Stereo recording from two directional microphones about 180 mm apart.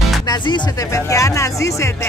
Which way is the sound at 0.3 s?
20° left (ahead or behind).